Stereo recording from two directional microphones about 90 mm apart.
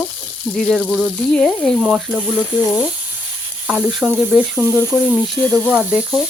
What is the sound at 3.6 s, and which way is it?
Frying, 10° right (ahead or behind).